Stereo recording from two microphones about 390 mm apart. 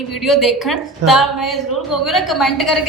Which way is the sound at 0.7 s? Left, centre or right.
Left.